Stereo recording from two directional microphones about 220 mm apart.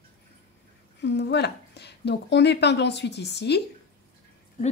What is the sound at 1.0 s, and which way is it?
A woman's voice, 50° left (ahead or behind).